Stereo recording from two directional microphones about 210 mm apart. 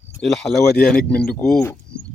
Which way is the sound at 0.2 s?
Centre (ahead or behind).